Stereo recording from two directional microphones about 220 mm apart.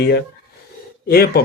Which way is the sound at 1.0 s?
45° left (ahead or behind).